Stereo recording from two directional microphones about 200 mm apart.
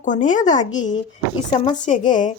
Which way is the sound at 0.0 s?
40° left (ahead or behind).